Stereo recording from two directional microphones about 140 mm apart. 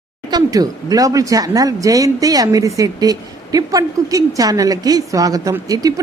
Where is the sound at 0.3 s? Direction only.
30° right (ahead or behind).